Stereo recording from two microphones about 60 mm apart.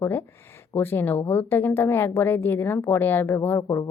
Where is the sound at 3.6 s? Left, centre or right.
Left.